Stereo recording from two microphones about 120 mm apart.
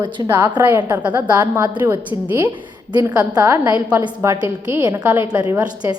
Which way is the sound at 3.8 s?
10° right (ahead or behind).